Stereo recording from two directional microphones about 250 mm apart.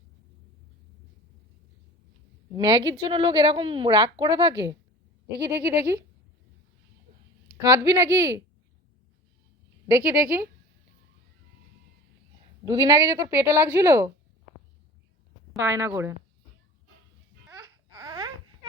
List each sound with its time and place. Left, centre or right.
2.6 s a woman's voice: centre
7.6 s a woman's voice: centre
9.9 s a woman's voice: centre
12.6 s a woman's voice: centre
15.5 s a woman's voice: centre
17.5 s babbling: centre